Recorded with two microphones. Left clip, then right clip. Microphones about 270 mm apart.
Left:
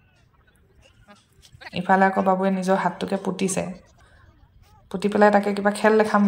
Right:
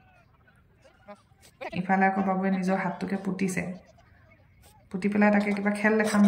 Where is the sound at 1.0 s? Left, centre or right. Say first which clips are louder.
Right 4 dB; right.